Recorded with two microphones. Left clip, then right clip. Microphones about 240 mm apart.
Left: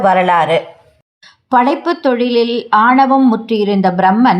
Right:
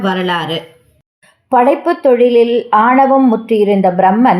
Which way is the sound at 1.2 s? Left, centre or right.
Left.